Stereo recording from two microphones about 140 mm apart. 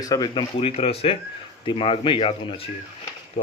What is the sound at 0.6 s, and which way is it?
Speech, 45° left (ahead or behind).